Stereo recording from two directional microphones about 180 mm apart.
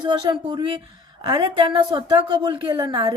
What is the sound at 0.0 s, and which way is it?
A woman's voice, 25° right (ahead or behind).